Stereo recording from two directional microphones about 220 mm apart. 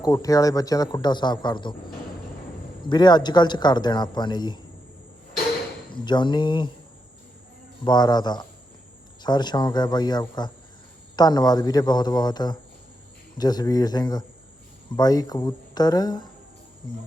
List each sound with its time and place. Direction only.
0.0 s a man's voice: 15° left (ahead or behind)
2.8 s speech: 20° left (ahead or behind)
5.9 s speech: 20° left (ahead or behind)
7.9 s a man's voice: 20° left (ahead or behind)